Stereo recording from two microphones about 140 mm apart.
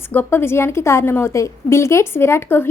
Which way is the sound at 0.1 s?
15° left (ahead or behind).